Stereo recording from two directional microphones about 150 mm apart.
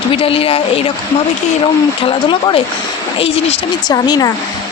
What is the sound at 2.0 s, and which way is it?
Speech, 35° left (ahead or behind).